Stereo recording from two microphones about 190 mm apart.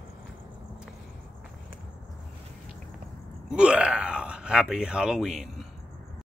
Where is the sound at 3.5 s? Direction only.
5° right (ahead or behind).